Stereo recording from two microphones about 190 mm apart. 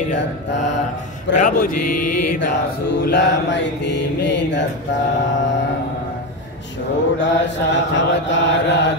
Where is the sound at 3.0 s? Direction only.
65° left (ahead or behind).